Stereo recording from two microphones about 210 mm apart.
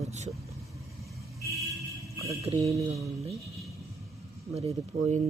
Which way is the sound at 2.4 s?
30° right (ahead or behind).